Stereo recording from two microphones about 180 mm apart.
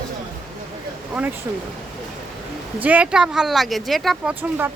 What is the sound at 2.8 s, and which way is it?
Speech, 10° right (ahead or behind).